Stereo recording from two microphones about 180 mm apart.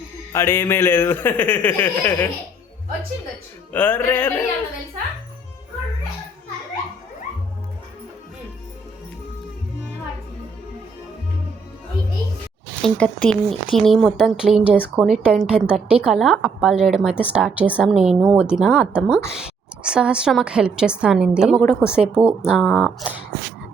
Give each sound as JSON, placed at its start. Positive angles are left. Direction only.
{"t": 0.3, "sound": "speech", "side_deg": 15}
{"t": 3.7, "sound": "speech", "side_deg": 10}
{"t": 12.8, "sound": "a woman's voice", "side_deg": 5}